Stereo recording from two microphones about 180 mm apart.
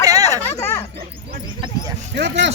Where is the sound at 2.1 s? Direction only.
75° right (ahead or behind).